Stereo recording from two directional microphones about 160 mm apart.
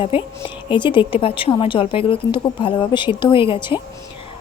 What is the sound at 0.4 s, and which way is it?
A woman's voice, 30° left (ahead or behind).